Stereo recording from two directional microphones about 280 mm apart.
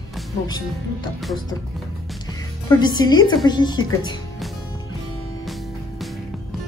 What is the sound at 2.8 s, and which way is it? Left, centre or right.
Speech, centre.